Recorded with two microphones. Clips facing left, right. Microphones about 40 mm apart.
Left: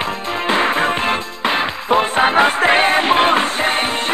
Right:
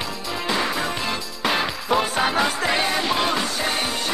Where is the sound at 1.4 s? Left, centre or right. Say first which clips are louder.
Left 4 dB; left.